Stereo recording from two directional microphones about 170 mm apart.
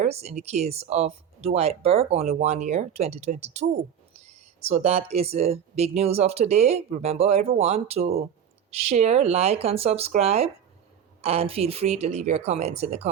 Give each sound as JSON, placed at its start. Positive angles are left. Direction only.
{"t": 0.0, "sound": "speech", "side_deg": -40}